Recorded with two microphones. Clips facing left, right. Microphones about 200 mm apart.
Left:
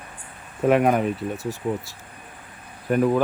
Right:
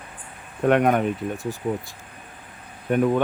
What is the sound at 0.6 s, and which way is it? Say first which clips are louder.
Speech: even; centre (ahead or behind).